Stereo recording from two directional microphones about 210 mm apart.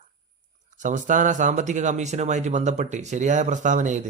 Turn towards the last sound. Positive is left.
turn(degrees=-35)  # may be behind; listen again after turning